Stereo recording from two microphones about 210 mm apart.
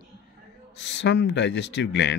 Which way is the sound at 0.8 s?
55° left (ahead or behind).